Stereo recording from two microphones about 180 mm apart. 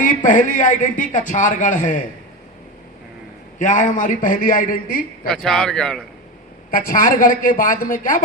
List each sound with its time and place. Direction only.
0.0 s a man's voice: 50° left (ahead or behind)
3.6 s a man's voice: 45° left (ahead or behind)
5.3 s speech: 5° left (ahead or behind)
6.7 s a man's voice: 50° left (ahead or behind)